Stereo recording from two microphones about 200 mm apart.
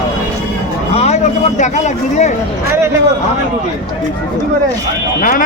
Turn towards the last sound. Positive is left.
turn(degrees=45)  # may be behind; listen again after turning